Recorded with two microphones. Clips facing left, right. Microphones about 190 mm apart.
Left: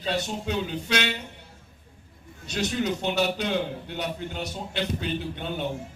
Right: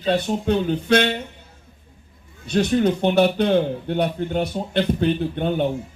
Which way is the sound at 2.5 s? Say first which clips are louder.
Right 9 dB; 55° right (ahead or behind).